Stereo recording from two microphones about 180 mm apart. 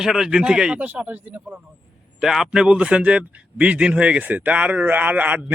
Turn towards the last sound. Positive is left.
turn(degrees=-10)  # may be behind; listen again after turning